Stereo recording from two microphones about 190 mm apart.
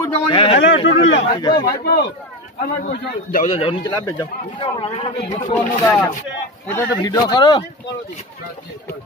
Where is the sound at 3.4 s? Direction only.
30° left (ahead or behind).